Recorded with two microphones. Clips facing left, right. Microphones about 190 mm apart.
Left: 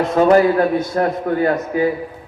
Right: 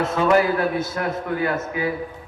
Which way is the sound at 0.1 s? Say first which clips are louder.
Left 7 dB; 35° left (ahead or behind).